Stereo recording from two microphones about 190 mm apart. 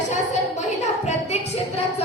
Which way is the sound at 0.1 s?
40° left (ahead or behind).